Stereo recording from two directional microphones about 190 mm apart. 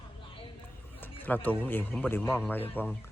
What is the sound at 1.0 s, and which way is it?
Speech, 10° left (ahead or behind).